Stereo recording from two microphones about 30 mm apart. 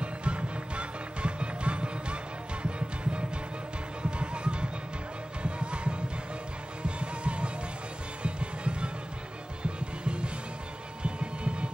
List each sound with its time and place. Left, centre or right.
0.0 s music: right
11.0 s heart sounds: right